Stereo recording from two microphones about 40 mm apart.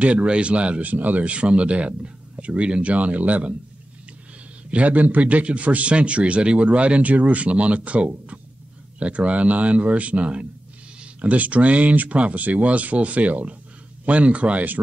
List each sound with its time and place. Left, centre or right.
0.0 s a man's voice: right
0.8 s speech: right
1.2 s a man's voice: right
4.6 s a man's voice: right